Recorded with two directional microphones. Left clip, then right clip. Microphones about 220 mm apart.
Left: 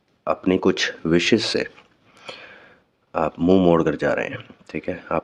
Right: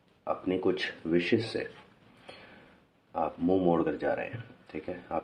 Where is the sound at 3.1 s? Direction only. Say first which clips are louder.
Left 10 dB; 45° left (ahead or behind).